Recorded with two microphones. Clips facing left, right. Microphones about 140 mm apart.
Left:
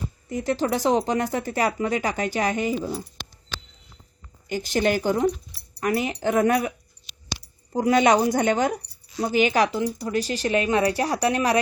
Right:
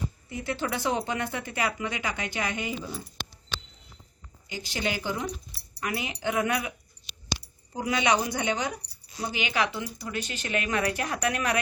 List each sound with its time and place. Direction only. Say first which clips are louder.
0.3 s speech: left 8 dB; 40° left (ahead or behind)
4.4 s a woman's voice: left 9 dB; 50° left (ahead or behind); by 11.6 s 30° left (ahead or behind)